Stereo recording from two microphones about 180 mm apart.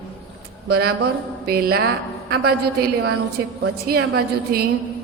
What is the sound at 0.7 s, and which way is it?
A woman's voice, 60° right (ahead or behind).